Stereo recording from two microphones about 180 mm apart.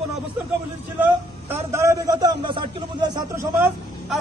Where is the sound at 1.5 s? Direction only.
15° right (ahead or behind).